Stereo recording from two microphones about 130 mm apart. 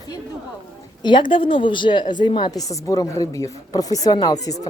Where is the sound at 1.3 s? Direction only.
40° left (ahead or behind).